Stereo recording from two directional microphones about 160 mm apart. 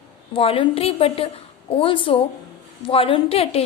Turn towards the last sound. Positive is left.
turn(degrees=35)  # may be behind; listen again after turning